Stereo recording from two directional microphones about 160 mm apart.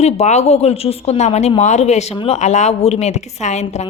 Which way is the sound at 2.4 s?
45° left (ahead or behind).